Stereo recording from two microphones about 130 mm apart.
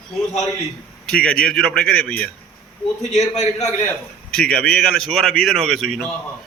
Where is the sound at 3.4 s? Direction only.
60° left (ahead or behind).